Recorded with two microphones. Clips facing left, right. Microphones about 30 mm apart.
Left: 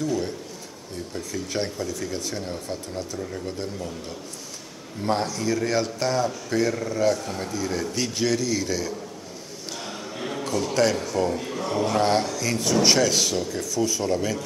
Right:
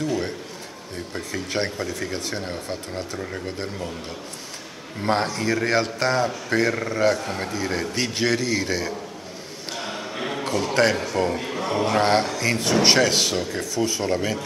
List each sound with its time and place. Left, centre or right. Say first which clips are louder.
0.0 s a sound: right 1 dB; right
0.9 s speech: right 1 dB; right
5.0 s speech: right 2 dB; right